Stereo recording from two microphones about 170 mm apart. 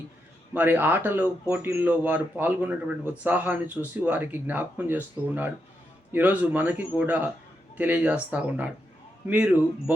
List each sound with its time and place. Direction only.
0.5 s speech: 10° right (ahead or behind)